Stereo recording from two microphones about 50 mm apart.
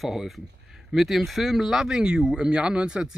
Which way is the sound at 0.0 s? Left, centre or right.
Centre.